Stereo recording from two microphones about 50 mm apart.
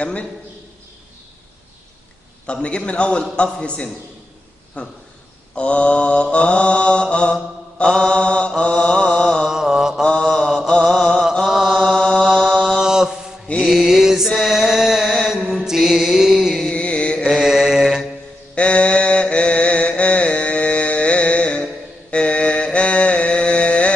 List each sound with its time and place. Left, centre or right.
0.0 s a man's voice: left
2.4 s mantra: left
9.5 s mantra: centre
10.2 s mantra: centre
12.8 s mantra: centre
16.6 s music: left
17.3 s mantra: centre
18.5 s mantra: left